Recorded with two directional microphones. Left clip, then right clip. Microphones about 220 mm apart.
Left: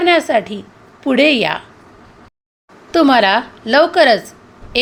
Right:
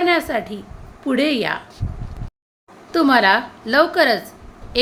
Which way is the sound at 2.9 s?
15° left (ahead or behind).